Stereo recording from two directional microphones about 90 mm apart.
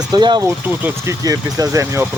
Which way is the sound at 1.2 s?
40° right (ahead or behind).